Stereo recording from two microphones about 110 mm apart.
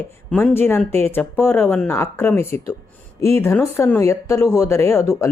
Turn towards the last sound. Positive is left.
turn(degrees=25)  # may be behind; listen again after turning